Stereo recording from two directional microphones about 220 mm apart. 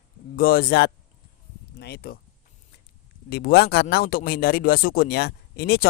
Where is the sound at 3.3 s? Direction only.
45° left (ahead or behind).